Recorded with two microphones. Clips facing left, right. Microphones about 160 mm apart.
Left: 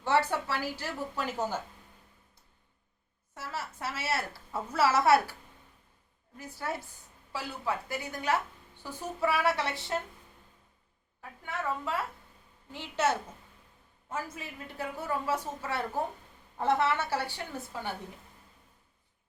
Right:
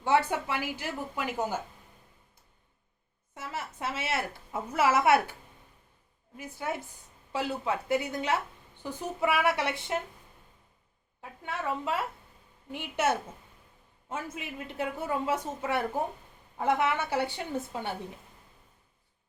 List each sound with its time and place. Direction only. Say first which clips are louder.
0.0 s a woman's voice: right 2 dB; 15° right (ahead or behind)
3.3 s a woman's voice: right 1 dB; 20° right (ahead or behind)
11.2 s a woman's voice: right 1 dB; 20° right (ahead or behind)